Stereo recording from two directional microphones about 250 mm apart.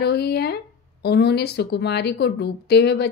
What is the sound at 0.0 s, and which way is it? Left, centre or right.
A woman's voice, left.